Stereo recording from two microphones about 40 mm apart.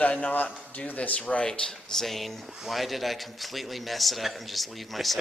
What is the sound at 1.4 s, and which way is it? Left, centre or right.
Speech, centre.